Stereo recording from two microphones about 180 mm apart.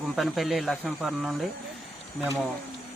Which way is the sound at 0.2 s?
Centre (ahead or behind).